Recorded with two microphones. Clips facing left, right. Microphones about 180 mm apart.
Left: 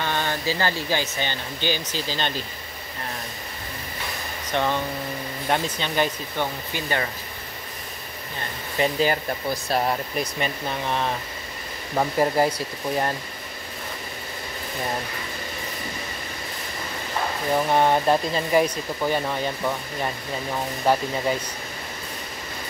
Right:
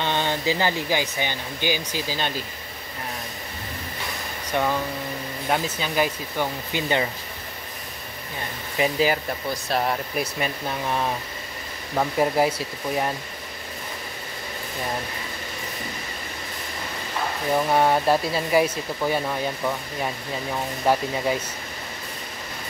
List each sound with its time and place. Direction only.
0.0 s speech: 20° right (ahead or behind)
4.5 s speech: 10° right (ahead or behind)
6.7 s speech: 20° right (ahead or behind)
8.7 s speech: 5° right (ahead or behind)
17.6 s speech: 5° right (ahead or behind)